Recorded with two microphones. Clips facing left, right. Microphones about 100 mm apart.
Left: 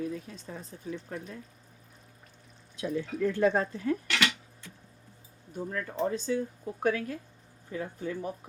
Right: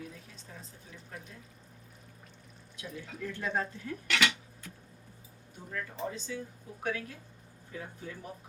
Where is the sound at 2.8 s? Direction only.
55° left (ahead or behind).